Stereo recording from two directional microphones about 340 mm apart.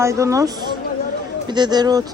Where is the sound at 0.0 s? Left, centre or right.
Centre.